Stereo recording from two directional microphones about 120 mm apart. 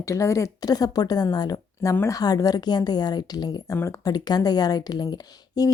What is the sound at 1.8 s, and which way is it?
A woman's voice, 20° left (ahead or behind).